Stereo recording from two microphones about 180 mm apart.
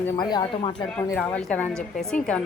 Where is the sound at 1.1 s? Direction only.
5° left (ahead or behind).